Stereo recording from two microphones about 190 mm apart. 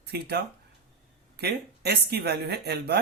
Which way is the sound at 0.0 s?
60° right (ahead or behind).